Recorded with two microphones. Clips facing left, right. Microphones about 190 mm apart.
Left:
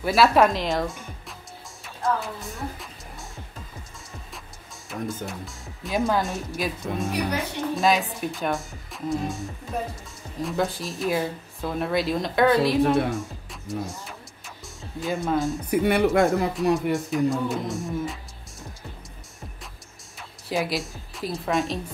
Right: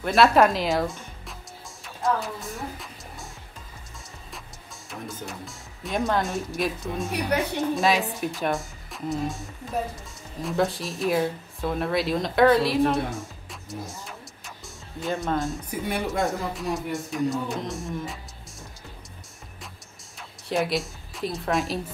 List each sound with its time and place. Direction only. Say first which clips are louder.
0.0 s speech: even; centre (ahead or behind)
2.0 s music: even; centre (ahead or behind)
4.8 s speech: left 5 dB; centre (ahead or behind)
15.7 s speech: left 10 dB; 65° left (ahead or behind)
16.9 s speech: left 3 dB; centre (ahead or behind)
20.2 s a woman's voice: right 1 dB; centre (ahead or behind)